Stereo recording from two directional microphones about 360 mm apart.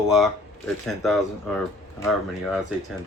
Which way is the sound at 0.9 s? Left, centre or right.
Centre.